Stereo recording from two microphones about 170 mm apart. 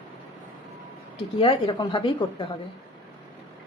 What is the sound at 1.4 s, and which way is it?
A woman's voice, 30° left (ahead or behind).